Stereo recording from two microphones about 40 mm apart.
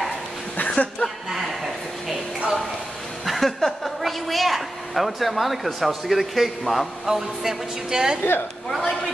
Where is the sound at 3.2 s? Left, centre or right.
Centre.